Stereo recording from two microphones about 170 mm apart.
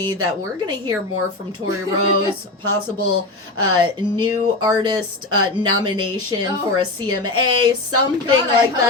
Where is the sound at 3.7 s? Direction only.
25° right (ahead or behind).